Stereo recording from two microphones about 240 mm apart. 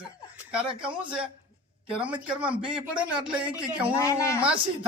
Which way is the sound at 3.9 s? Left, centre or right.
Centre.